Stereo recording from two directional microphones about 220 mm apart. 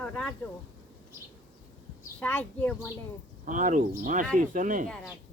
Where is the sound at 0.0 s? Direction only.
5° left (ahead or behind).